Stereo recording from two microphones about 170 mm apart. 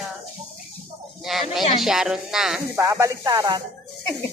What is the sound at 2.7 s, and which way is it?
Speech, 15° right (ahead or behind).